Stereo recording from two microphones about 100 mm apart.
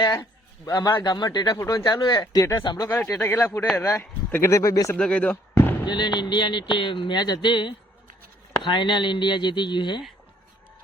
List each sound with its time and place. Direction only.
0.6 s speech: 35° left (ahead or behind)
3.1 s speech: 25° left (ahead or behind)
4.9 s speech: 10° left (ahead or behind)
5.8 s speech: 50° left (ahead or behind)